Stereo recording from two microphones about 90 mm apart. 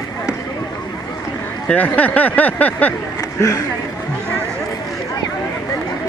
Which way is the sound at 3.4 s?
35° left (ahead or behind).